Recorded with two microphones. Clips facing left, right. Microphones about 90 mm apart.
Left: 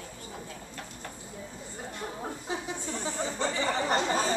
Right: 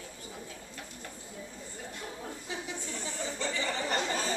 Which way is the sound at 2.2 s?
35° left (ahead or behind).